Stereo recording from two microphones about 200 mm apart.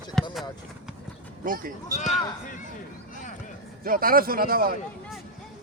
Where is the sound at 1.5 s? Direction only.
45° right (ahead or behind).